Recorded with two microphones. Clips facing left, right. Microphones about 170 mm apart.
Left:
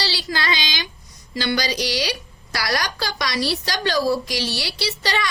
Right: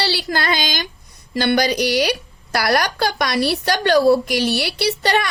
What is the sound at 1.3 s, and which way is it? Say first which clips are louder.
A woman's voice: right 6 dB; 60° right (ahead or behind).